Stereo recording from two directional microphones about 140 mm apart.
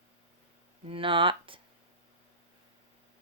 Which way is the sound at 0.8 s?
40° right (ahead or behind).